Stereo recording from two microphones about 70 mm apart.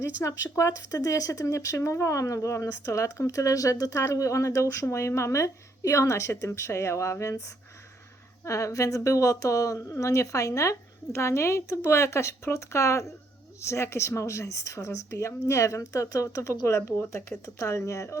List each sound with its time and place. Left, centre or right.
0.2 s speech: left